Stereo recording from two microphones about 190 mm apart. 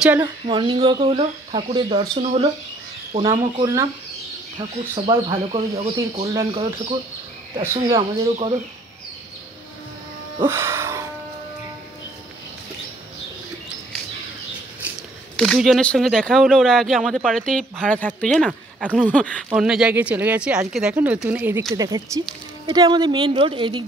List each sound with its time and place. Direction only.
0.0 s speech: 10° right (ahead or behind)
0.5 s speech: 25° right (ahead or behind)
6.5 s speech: 30° right (ahead or behind)
10.4 s a sound: 15° right (ahead or behind)
15.3 s speech: centre (ahead or behind)
18.8 s speech: 5° right (ahead or behind)
19.0 s speech: 5° left (ahead or behind); by 23.8 s 25° right (ahead or behind)